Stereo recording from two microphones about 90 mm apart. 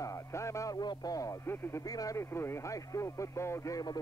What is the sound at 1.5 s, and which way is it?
Speech, 25° left (ahead or behind).